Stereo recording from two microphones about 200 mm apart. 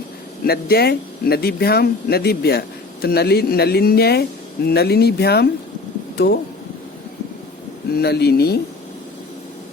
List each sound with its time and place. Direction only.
0.4 s speech: 50° left (ahead or behind)
7.9 s speech: 55° left (ahead or behind)